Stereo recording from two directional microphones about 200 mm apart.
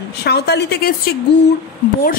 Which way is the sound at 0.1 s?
55° left (ahead or behind).